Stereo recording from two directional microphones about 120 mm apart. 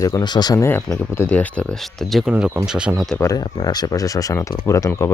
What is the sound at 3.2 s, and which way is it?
Speech, 30° left (ahead or behind).